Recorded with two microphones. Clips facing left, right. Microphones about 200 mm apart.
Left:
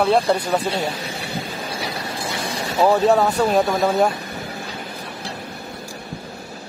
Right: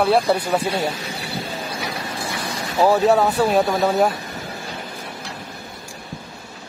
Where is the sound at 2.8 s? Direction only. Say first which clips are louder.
Even; 5° right (ahead or behind).